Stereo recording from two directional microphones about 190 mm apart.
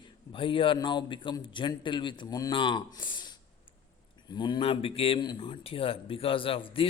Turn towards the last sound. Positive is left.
turn(degrees=30)  # may be behind; listen again after turning